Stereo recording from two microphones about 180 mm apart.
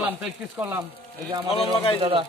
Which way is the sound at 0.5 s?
15° right (ahead or behind).